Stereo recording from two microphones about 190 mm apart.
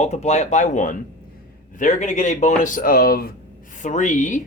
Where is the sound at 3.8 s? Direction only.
40° left (ahead or behind).